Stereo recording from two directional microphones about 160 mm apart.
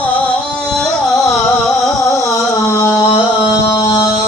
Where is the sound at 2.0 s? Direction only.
20° left (ahead or behind).